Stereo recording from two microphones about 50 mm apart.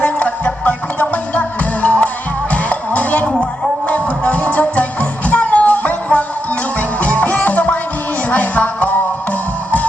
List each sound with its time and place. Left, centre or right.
0.0 s music: left